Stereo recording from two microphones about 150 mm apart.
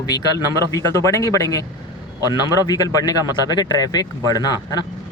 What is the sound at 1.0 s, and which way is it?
A man's voice, 20° left (ahead or behind).